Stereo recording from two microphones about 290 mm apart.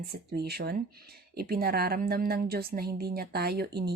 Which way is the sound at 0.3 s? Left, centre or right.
Right.